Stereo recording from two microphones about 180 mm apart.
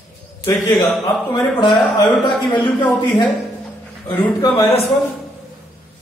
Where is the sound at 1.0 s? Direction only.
20° left (ahead or behind).